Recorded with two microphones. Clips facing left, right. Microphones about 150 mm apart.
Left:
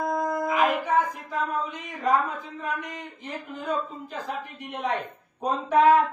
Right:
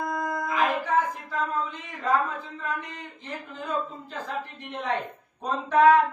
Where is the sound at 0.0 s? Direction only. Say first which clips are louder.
Left 3 dB; 25° left (ahead or behind).